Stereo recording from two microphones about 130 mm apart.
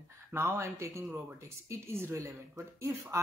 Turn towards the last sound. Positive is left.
turn(degrees=-25)  # may be behind; listen again after turning